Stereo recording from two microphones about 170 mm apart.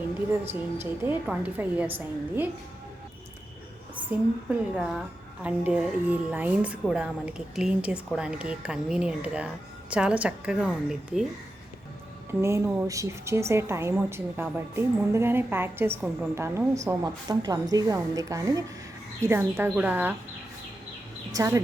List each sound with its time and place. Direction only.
1.0 s a woman's voice: 10° right (ahead or behind)
4.4 s a woman's voice: 5° right (ahead or behind)
12.3 s a woman's voice: 15° right (ahead or behind)
21.3 s a woman's voice: 15° right (ahead or behind)